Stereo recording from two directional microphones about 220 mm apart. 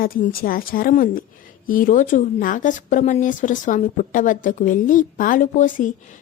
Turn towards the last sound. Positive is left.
turn(degrees=35)  # may be behind; listen again after turning